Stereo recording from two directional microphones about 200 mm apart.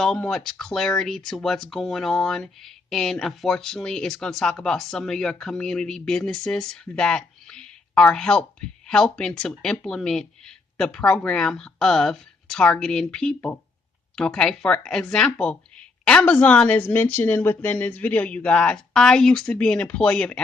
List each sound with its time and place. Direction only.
0.0 s speech: centre (ahead or behind)